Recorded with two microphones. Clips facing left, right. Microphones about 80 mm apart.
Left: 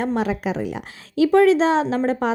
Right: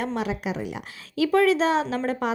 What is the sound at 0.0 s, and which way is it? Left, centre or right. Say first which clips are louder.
A woman's voice: left 5 dB; left.